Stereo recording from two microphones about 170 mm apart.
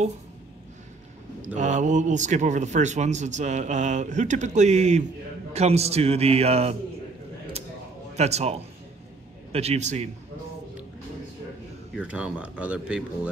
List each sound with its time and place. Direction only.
1.5 s a man's voice: 45° right (ahead or behind)
8.2 s a man's voice: 40° right (ahead or behind)
11.9 s speech: 5° right (ahead or behind)